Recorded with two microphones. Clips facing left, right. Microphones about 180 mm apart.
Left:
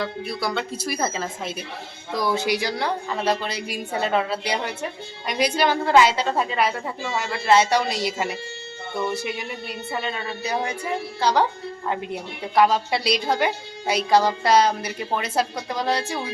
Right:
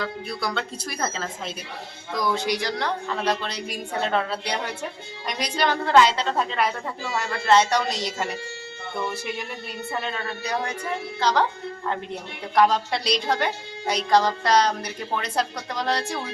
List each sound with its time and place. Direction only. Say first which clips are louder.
0.0 s a woman's voice: left 2 dB; 5° left (ahead or behind)
9.9 s a woman's voice: left 1 dB; 5° left (ahead or behind)